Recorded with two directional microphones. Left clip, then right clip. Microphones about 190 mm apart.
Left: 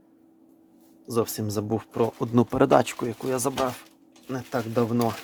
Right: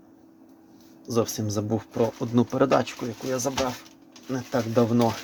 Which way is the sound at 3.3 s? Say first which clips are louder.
Even; 45° left (ahead or behind).